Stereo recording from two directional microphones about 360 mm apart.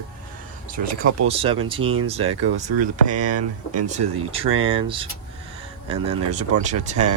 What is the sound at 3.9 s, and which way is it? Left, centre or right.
Speech, centre.